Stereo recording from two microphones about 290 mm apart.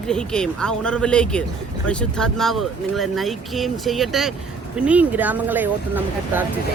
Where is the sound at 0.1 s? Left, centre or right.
Centre.